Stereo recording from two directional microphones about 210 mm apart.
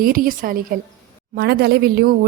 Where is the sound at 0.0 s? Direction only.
40° right (ahead or behind).